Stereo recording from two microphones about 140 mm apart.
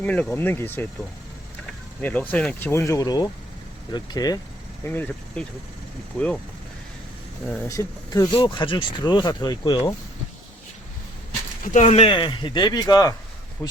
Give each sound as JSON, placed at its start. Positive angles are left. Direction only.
{"t": 0.0, "sound": "speech", "side_deg": 10}
{"t": 2.0, "sound": "speech", "side_deg": 10}
{"t": 4.9, "sound": "speech", "side_deg": 10}
{"t": 7.7, "sound": "speech", "side_deg": 20}
{"t": 8.3, "sound": "speech", "side_deg": 35}
{"t": 11.6, "sound": "speech", "side_deg": 65}
{"t": 11.9, "sound": "speech", "side_deg": 40}
{"t": 13.6, "sound": "speech", "side_deg": 15}